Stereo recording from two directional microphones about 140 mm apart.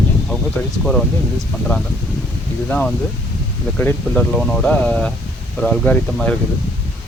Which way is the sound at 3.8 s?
15° left (ahead or behind).